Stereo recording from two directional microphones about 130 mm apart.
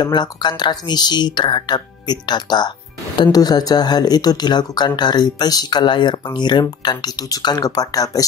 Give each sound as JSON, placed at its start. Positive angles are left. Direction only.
{"t": 0.0, "sound": "speech", "side_deg": 35}